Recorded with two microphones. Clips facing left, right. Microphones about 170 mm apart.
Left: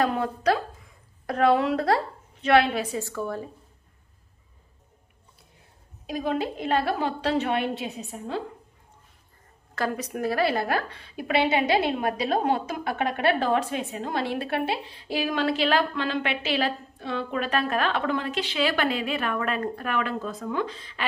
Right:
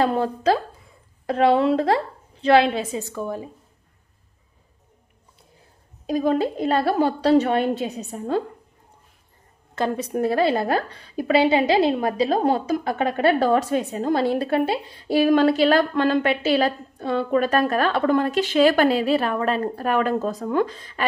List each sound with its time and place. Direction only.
0.0 s a woman's voice: 30° right (ahead or behind)
6.0 s a woman's voice: 40° right (ahead or behind)
9.8 s a woman's voice: 25° right (ahead or behind); by 21.0 s 45° right (ahead or behind)